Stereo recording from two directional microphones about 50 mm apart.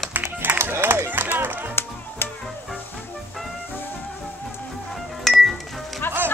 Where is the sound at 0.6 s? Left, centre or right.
Right.